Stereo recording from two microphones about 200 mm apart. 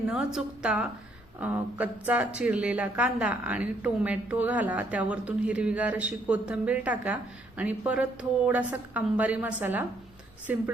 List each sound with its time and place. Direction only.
0.1 s a woman's voice: 5° right (ahead or behind)